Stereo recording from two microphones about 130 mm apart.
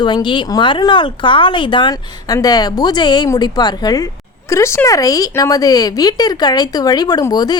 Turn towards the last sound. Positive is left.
turn(degrees=30)  # may be behind; listen again after turning